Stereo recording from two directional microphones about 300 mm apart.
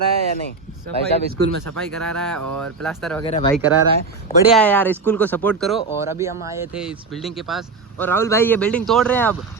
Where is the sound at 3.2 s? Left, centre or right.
Centre.